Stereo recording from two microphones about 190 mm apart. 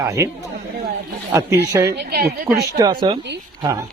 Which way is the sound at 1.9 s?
55° right (ahead or behind).